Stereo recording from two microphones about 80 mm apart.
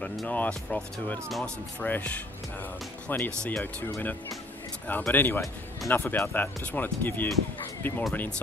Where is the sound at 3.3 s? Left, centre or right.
Centre.